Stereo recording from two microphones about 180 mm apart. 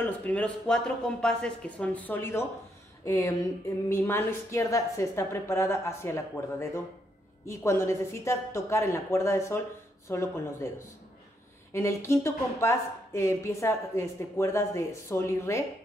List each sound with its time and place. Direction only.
0.0 s speech: 5° left (ahead or behind)
11.7 s speech: 15° left (ahead or behind)